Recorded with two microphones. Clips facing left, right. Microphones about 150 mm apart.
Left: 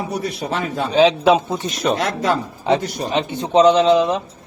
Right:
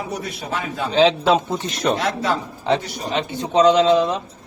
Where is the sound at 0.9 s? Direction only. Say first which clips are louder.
Left 2 dB; 15° left (ahead or behind).